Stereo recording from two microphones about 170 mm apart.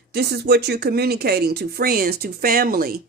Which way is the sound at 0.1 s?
70° right (ahead or behind).